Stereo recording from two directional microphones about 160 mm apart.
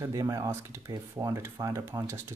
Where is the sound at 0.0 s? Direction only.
20° right (ahead or behind).